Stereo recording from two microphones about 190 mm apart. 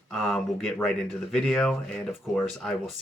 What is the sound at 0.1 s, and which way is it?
Speech, centre (ahead or behind).